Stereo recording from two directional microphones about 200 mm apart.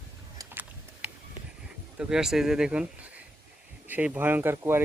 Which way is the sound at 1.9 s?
5° right (ahead or behind).